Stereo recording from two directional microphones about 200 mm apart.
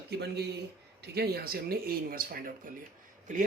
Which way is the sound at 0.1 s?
55° right (ahead or behind).